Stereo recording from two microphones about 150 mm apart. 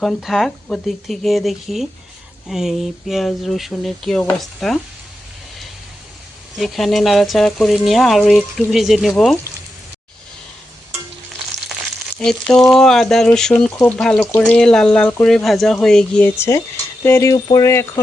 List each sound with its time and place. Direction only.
0.0 s speech: centre (ahead or behind)
6.6 s speech: centre (ahead or behind)
12.1 s speech: 5° left (ahead or behind)